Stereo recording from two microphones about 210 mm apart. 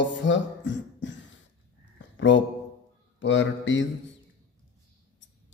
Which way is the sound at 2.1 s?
60° left (ahead or behind).